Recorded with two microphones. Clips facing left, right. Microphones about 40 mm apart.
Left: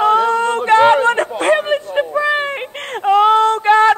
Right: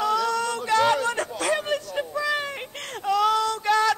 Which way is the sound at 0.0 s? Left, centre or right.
Left.